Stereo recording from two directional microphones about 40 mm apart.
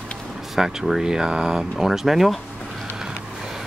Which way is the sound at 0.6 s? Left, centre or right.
Centre.